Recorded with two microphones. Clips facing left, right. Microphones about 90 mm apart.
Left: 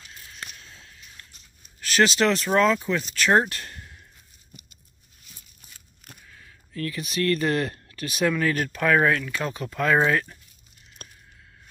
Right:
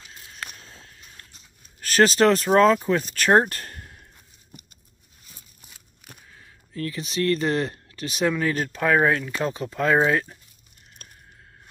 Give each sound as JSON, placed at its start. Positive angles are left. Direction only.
{"t": 0.0, "sound": "walk", "side_deg": -25}
{"t": 1.8, "sound": "speech", "side_deg": -40}
{"t": 6.3, "sound": "speech", "side_deg": -25}
{"t": 11.0, "sound": "a sound", "side_deg": 50}